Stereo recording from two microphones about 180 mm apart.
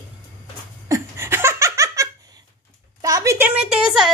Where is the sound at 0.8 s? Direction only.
15° right (ahead or behind).